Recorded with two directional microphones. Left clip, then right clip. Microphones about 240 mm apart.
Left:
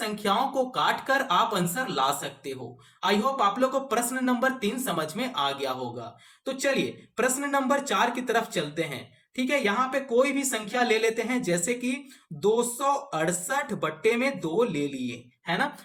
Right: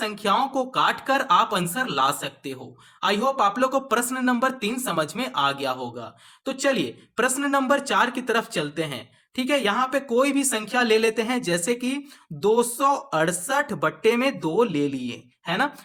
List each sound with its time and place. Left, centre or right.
0.2 s speech: right
13.1 s speech: right